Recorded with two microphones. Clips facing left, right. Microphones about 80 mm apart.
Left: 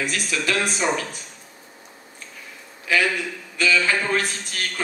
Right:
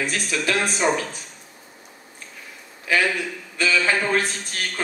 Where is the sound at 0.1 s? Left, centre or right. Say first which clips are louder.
Right 1 dB; centre.